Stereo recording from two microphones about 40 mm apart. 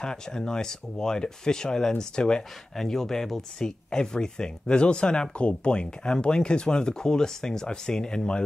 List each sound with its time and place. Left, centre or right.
0.0 s speech: centre
2.7 s speech: centre